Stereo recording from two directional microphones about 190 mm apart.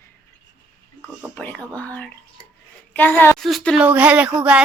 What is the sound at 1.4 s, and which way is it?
Speech, 10° left (ahead or behind).